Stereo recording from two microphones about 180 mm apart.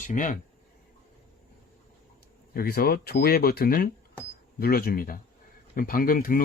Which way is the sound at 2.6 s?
60° left (ahead or behind).